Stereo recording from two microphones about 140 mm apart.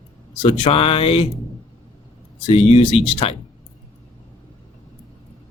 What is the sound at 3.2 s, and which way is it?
Speech, 45° left (ahead or behind).